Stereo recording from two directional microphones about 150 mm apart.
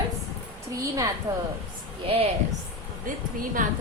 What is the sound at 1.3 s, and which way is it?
Speech, 25° right (ahead or behind).